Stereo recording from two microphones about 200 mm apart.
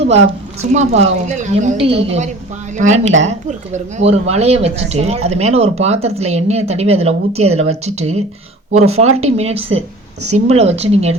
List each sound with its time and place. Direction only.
0.0 s speech: 35° right (ahead or behind)